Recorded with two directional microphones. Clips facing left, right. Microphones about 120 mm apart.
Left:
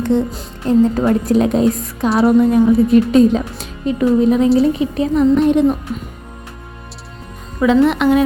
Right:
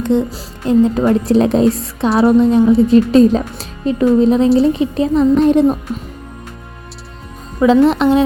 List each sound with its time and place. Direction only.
0.0 s music: 15° right (ahead or behind)
0.7 s a woman's voice: 15° right (ahead or behind)
1.2 s a woman's voice: 30° right (ahead or behind)
7.6 s speech: 30° right (ahead or behind)